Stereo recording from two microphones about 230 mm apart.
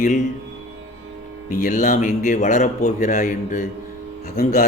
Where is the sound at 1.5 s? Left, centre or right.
Left.